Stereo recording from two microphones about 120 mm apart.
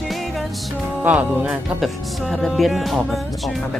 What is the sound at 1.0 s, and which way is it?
Speech, 10° right (ahead or behind).